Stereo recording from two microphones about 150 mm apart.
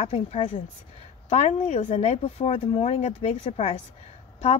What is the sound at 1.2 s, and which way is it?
A woman's voice, 45° left (ahead or behind).